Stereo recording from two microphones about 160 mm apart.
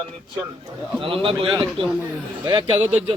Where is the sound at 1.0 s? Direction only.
35° right (ahead or behind).